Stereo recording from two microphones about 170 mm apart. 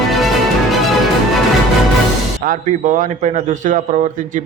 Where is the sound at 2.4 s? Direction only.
50° right (ahead or behind).